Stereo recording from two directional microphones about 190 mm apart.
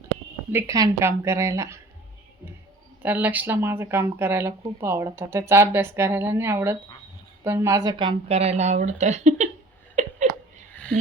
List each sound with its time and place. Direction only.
0.5 s speech: 15° right (ahead or behind)
3.0 s a woman's voice: 10° right (ahead or behind); by 9.5 s 35° right (ahead or behind)
9.9 s a sound: 40° right (ahead or behind)